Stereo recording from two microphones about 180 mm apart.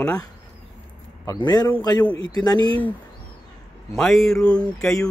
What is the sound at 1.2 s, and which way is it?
Mantra, 20° left (ahead or behind).